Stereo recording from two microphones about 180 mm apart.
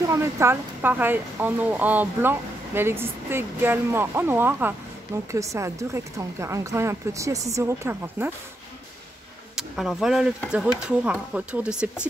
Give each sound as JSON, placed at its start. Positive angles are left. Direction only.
{"t": 0.1, "sound": "speech", "side_deg": -15}
{"t": 9.6, "sound": "speech", "side_deg": 0}